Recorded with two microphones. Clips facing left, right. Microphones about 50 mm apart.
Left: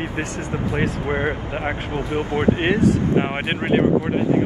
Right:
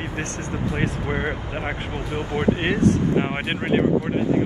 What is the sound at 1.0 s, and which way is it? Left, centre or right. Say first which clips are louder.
Speech: left 3 dB; left.